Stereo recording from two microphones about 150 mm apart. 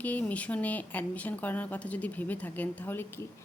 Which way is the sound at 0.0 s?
10° left (ahead or behind).